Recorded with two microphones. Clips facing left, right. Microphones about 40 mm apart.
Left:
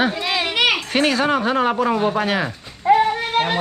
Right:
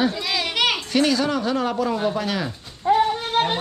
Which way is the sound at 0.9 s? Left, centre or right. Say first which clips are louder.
Left 2 dB; left.